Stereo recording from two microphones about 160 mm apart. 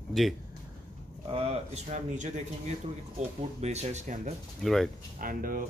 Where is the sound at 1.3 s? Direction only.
40° right (ahead or behind).